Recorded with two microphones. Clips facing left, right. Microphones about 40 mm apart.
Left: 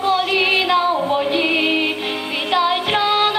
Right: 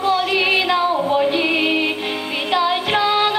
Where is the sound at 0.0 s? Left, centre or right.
Left.